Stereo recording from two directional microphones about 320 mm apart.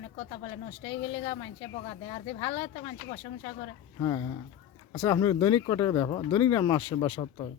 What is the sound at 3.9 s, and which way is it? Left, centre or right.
Speech, centre.